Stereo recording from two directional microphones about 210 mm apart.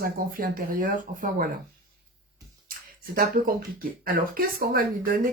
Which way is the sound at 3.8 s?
45° right (ahead or behind).